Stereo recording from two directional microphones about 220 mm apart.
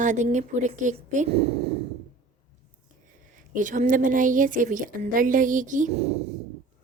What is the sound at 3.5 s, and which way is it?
A woman's voice, 35° right (ahead or behind).